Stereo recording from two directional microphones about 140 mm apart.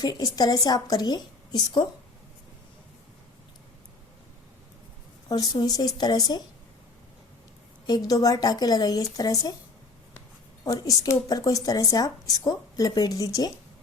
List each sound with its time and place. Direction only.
0.0 s speech: 30° left (ahead or behind)
5.3 s speech: 30° left (ahead or behind)
7.9 s speech: 25° left (ahead or behind)
10.7 s speech: 30° left (ahead or behind)